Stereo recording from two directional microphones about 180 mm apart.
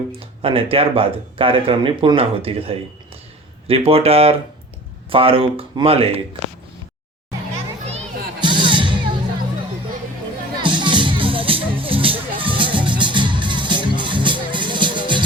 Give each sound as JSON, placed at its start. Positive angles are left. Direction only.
{"t": 0.4, "sound": "speech", "side_deg": -30}
{"t": 7.9, "sound": "music", "side_deg": -30}
{"t": 10.6, "sound": "music", "side_deg": -25}